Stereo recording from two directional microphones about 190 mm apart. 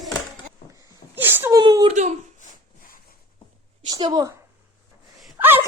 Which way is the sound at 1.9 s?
40° right (ahead or behind).